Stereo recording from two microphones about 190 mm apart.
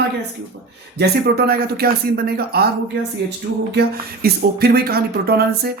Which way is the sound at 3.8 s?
55° right (ahead or behind).